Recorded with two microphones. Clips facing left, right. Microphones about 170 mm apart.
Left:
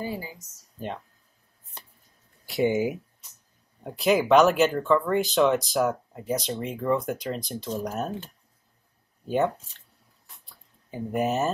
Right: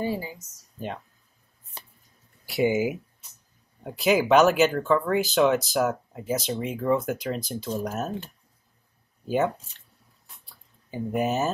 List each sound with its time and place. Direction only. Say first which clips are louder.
0.0 s speech: right 4 dB; 25° right (ahead or behind)
0.7 s speech: even; centre (ahead or behind)
2.4 s speech: right 1 dB; 5° right (ahead or behind)
10.9 s speech: even; centre (ahead or behind)